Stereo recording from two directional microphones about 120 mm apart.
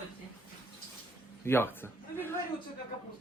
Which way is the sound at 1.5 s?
20° left (ahead or behind).